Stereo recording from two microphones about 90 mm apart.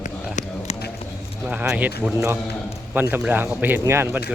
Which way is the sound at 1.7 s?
20° right (ahead or behind).